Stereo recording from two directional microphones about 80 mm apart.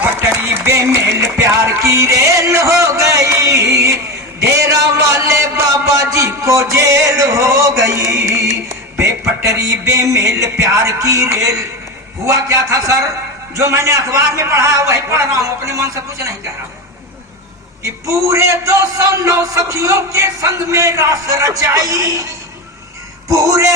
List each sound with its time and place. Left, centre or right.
0.2 s music: right
12.2 s a man's voice: right
17.8 s a man's voice: right
23.3 s speech: right